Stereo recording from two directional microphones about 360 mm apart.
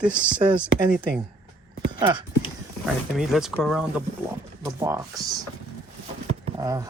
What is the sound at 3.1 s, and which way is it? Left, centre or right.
Speech, centre.